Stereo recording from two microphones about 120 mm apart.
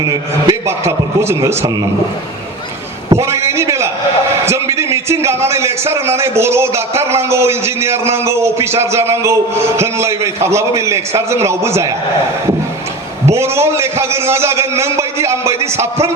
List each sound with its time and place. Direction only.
0.0 s a man's voice: 30° right (ahead or behind)
3.1 s a sound: 25° right (ahead or behind)
4.4 s a man's voice: 25° right (ahead or behind)
13.2 s a man's voice: 20° right (ahead or behind)